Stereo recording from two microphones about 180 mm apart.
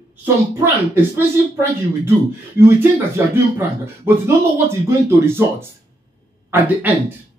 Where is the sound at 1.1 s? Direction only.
15° right (ahead or behind).